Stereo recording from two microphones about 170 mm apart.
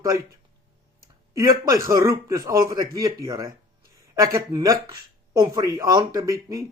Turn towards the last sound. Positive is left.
turn(degrees=-20)  # may be behind; listen again after turning